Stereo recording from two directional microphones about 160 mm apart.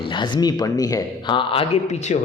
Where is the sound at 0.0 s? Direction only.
30° left (ahead or behind).